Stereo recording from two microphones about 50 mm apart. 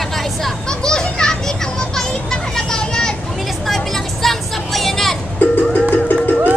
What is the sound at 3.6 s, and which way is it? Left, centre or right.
Vehicle, centre.